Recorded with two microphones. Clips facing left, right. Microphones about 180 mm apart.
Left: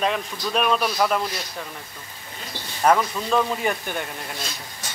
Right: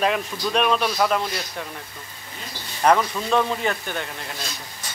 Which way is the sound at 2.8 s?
Centre (ahead or behind).